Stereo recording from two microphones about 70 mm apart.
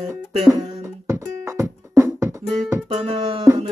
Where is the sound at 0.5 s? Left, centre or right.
Right.